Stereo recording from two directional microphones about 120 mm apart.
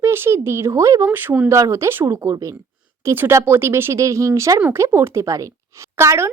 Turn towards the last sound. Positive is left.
turn(degrees=-20)  # may be behind; listen again after turning